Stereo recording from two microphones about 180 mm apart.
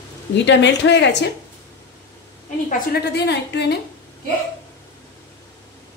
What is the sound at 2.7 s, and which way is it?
A woman's voice, 65° left (ahead or behind).